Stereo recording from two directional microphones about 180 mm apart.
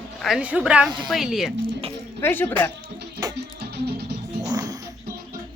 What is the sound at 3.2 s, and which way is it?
Music, 20° right (ahead or behind).